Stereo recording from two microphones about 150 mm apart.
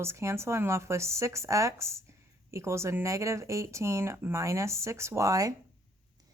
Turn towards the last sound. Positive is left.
turn(degrees=-25)  # may be behind; listen again after turning